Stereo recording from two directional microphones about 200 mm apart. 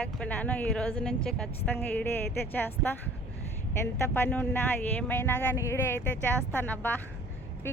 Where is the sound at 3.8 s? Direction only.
10° left (ahead or behind).